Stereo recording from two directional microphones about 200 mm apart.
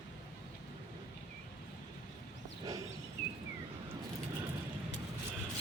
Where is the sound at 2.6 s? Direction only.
15° right (ahead or behind).